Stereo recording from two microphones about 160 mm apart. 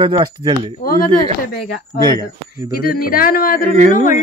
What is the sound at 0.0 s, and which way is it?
Speech, 25° right (ahead or behind).